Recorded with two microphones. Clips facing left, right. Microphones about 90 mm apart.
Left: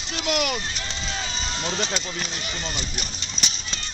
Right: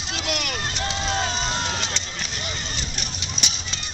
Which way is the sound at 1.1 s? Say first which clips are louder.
Right 6 dB; 50° right (ahead or behind).